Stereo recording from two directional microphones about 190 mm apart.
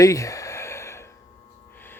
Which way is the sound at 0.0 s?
15° left (ahead or behind).